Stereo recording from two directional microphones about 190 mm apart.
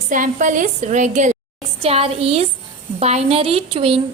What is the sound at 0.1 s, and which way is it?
A woman's voice, 45° right (ahead or behind).